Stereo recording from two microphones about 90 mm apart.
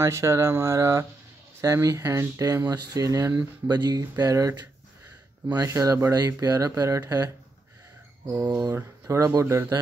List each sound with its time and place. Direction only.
0.0 s speech: 30° right (ahead or behind); by 4.1 s 50° right (ahead or behind)
4.2 s speech: 40° right (ahead or behind)
8.5 s speech: 50° right (ahead or behind)
8.7 s speech: 35° right (ahead or behind)